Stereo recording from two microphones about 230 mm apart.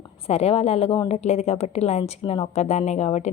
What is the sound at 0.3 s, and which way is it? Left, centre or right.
A woman's voice, left.